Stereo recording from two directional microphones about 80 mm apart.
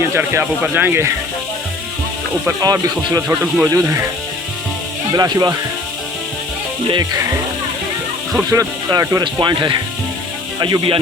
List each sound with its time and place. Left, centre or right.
0.0 s speech: right
3.2 s speech: right
3.7 s speech: right
5.1 s speech: right
8.5 s speech: right
9.2 s speech: right
10.6 s speech: right